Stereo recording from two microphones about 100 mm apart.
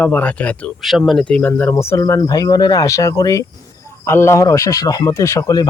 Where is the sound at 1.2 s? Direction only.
15° left (ahead or behind).